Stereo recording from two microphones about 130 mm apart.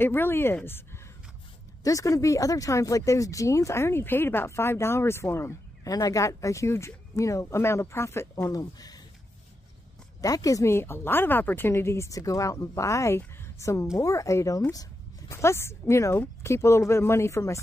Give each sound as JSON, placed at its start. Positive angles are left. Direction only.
{"t": 0.0, "sound": "speech", "side_deg": 15}
{"t": 10.2, "sound": "a woman's voice", "side_deg": 25}